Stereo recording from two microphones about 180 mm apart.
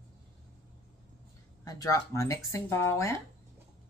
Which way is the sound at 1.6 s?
20° left (ahead or behind).